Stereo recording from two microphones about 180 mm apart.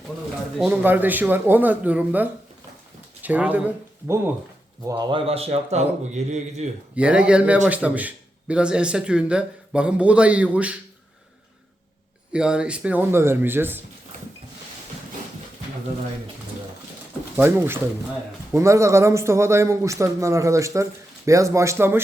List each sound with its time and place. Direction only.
0.6 s a man's voice: 10° right (ahead or behind)
4.8 s a man's voice: 20° right (ahead or behind); by 6.7 s 40° right (ahead or behind)
6.9 s a man's voice: 5° right (ahead or behind)
12.3 s a man's voice: 5° right (ahead or behind)
17.3 s a man's voice: 10° right (ahead or behind)